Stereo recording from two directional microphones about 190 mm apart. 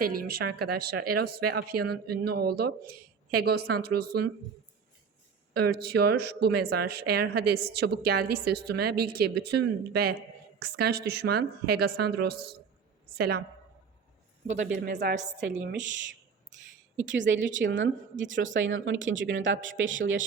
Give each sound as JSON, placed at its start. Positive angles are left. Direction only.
{"t": 0.0, "sound": "a woman's voice", "side_deg": -50}
{"t": 5.5, "sound": "a woman's voice", "side_deg": -55}
{"t": 14.5, "sound": "speech", "side_deg": -40}
{"t": 15.4, "sound": "a woman's voice", "side_deg": -70}
{"t": 17.1, "sound": "a woman's voice", "side_deg": -80}